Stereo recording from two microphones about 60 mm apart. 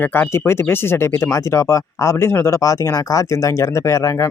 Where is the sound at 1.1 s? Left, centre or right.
Left.